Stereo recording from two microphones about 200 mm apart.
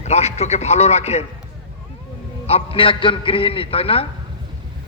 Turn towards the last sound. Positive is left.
turn(degrees=30)  # may be behind; listen again after turning